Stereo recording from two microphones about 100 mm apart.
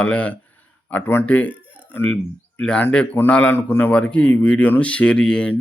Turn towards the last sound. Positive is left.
turn(degrees=10)  # may be behind; listen again after turning